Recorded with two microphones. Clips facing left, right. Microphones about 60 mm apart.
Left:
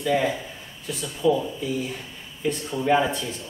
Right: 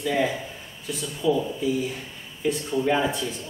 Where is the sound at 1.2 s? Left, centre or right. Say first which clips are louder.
Left 2 dB; centre.